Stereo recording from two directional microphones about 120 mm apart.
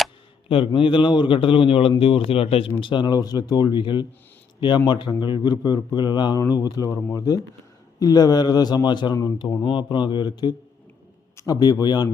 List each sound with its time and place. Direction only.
0.4 s a man's voice: 45° left (ahead or behind)
2.8 s a man's voice: 40° left (ahead or behind)